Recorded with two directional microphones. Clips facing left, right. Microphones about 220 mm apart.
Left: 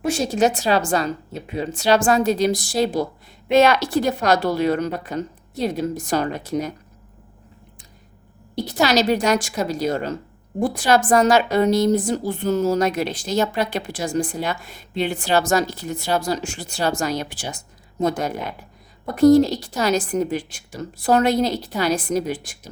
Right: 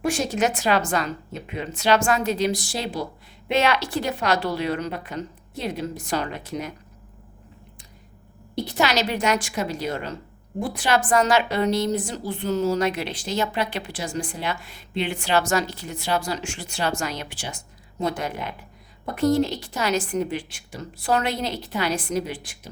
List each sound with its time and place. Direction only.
0.0 s a woman's voice: 25° left (ahead or behind)
8.8 s a woman's voice: 40° left (ahead or behind)